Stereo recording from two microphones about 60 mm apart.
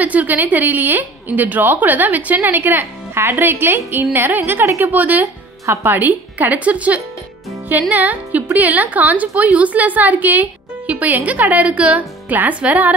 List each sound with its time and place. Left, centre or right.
0.0 s a woman's voice: right
4.6 s a woman's voice: right
4.9 s a woman's voice: right